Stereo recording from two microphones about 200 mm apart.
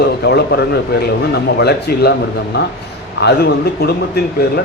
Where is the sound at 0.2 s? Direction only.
55° left (ahead or behind).